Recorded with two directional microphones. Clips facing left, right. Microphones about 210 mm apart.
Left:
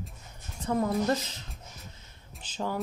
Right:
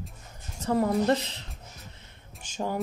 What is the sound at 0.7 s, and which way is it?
Speech, 30° right (ahead or behind).